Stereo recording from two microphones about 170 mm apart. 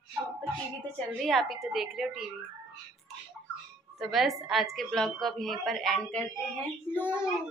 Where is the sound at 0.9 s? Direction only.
5° left (ahead or behind).